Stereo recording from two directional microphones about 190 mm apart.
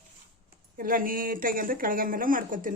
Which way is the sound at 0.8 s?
45° right (ahead or behind).